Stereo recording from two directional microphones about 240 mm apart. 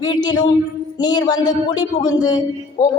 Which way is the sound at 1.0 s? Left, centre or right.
Centre.